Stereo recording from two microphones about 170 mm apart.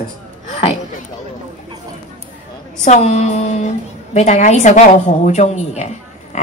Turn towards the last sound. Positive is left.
turn(degrees=40)  # may be behind; listen again after turning